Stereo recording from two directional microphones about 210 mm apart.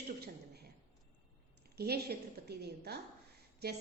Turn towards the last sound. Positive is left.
turn(degrees=-50)  # may be behind; listen again after turning